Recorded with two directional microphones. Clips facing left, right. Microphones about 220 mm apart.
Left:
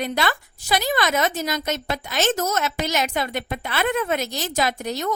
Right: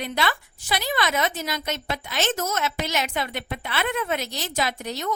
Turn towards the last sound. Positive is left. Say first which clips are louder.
# left 4 dB
turn(degrees=45)  # may be behind; listen again after turning